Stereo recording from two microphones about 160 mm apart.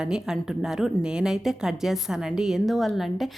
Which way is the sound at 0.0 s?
5° right (ahead or behind).